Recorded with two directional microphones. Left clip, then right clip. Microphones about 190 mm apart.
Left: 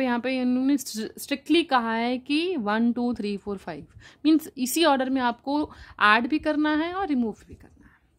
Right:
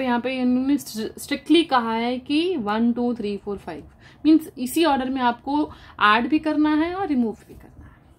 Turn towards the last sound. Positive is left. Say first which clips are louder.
# right 3 dB
turn(degrees=45)  # may be behind; listen again after turning